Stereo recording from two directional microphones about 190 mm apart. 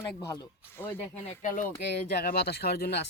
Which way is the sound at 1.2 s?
45° left (ahead or behind).